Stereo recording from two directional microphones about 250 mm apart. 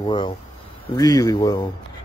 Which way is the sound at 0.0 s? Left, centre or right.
Centre.